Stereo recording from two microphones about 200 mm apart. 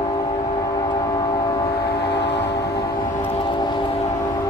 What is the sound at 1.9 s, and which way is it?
Train, 55° left (ahead or behind).